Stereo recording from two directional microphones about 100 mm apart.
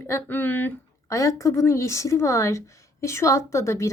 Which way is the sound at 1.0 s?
30° left (ahead or behind).